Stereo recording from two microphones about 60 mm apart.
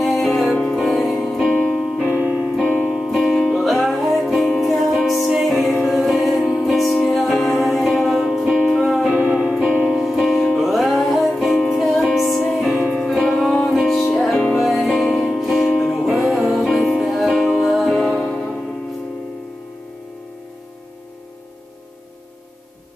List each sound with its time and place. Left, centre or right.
0.0 s music: centre
0.7 s music: centre
1.5 s keyboard: centre
2.1 s music: centre
2.9 s music: centre
5.9 s choir: centre
6.5 s music: centre
9.7 s music: centre